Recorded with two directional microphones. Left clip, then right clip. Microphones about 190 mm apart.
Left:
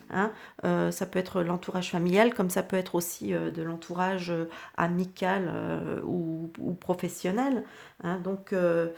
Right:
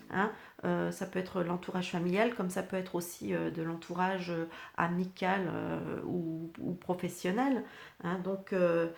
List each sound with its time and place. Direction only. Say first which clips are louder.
0.1 s speech: left 3 dB; 40° left (ahead or behind)